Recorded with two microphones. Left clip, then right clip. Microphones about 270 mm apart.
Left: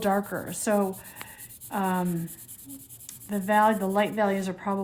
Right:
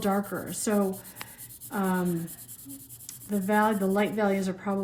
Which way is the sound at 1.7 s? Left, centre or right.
Left.